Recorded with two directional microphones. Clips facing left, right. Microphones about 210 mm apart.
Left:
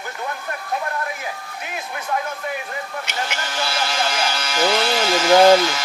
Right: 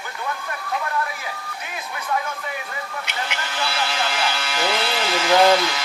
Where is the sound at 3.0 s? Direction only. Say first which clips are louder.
Left 2 dB; 45° left (ahead or behind).